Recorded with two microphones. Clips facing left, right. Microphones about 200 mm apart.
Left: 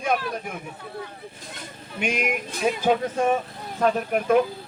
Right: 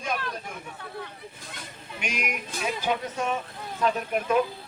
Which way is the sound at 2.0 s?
55° left (ahead or behind).